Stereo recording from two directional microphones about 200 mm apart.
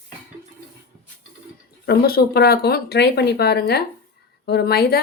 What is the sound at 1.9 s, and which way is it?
A woman's voice, 50° left (ahead or behind).